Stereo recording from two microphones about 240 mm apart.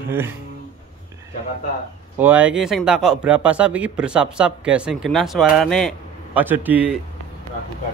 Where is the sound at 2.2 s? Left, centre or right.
Centre.